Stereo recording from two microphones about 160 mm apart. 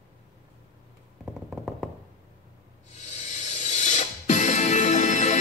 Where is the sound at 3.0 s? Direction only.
50° left (ahead or behind).